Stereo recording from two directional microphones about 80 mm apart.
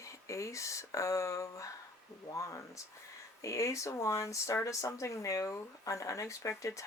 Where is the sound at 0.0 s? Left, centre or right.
Left.